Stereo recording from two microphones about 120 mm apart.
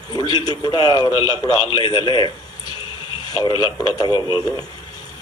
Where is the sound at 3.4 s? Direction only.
40° left (ahead or behind).